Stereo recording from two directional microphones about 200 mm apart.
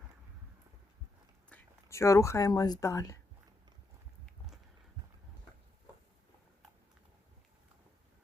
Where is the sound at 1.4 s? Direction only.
10° left (ahead or behind).